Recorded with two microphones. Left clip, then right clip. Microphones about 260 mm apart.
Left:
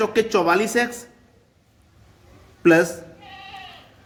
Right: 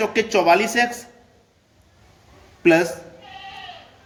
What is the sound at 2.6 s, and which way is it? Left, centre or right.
Speech, centre.